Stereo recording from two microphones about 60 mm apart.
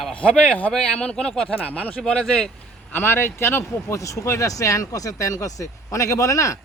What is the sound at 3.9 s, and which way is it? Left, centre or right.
Speech, left.